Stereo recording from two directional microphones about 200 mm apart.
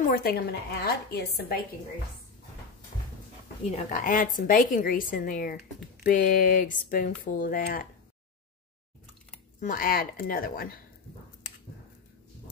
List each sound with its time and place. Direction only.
0.0 s speech: 45° left (ahead or behind)
3.9 s speech: 45° left (ahead or behind)
9.6 s speech: 45° left (ahead or behind)